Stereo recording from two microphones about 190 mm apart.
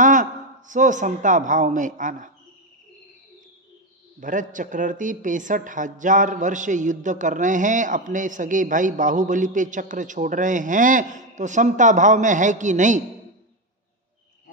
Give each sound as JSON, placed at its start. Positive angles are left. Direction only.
{"t": 0.0, "sound": "a man's voice", "side_deg": -45}
{"t": 4.2, "sound": "a man's voice", "side_deg": -45}